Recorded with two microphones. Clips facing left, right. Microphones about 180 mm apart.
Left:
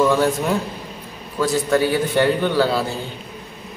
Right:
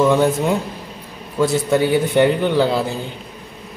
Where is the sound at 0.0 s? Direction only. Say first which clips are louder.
Right 2 dB; 20° right (ahead or behind).